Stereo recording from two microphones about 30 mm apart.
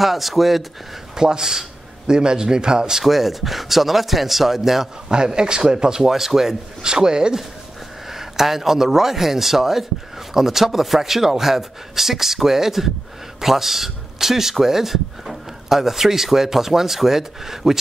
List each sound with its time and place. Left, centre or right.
0.0 s speech: centre
1.1 s a sound: right
2.1 s speech: right
3.0 s speech: centre
5.1 s speech: right
6.0 s speech: centre
6.8 s speech: right
8.1 s speech: centre